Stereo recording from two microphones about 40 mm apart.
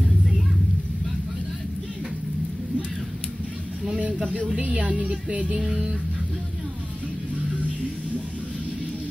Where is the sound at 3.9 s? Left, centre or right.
Right.